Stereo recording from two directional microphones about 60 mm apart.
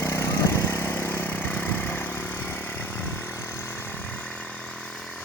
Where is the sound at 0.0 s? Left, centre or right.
Left.